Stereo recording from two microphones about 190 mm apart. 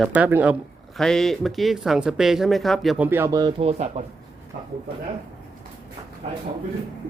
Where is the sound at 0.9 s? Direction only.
Centre (ahead or behind); by 3.5 s 20° right (ahead or behind).